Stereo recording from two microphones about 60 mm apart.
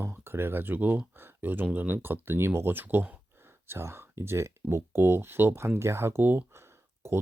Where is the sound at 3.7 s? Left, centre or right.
Right.